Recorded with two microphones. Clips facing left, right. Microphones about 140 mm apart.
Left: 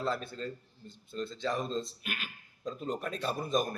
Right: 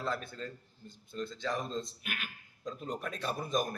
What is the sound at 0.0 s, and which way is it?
Speech, 25° left (ahead or behind).